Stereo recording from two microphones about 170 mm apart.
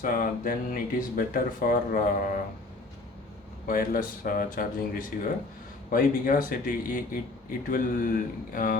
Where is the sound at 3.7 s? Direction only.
55° left (ahead or behind).